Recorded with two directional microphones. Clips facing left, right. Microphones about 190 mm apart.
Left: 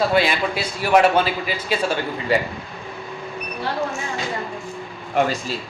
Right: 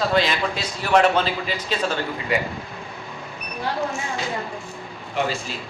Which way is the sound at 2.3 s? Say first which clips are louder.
Left 4 dB; 35° left (ahead or behind).